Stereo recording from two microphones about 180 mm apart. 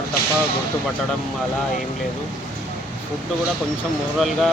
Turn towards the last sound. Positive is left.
turn(degrees=0)  # may be behind; listen again after turning